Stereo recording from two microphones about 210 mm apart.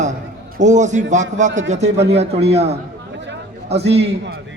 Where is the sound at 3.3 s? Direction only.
55° right (ahead or behind).